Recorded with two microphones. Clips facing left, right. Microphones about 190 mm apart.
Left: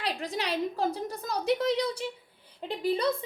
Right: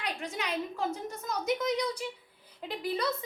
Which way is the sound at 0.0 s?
35° left (ahead or behind).